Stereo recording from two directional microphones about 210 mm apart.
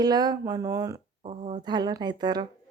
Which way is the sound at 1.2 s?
30° right (ahead or behind).